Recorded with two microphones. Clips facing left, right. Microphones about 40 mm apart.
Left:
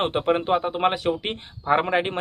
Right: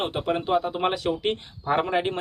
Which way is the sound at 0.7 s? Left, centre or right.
Centre.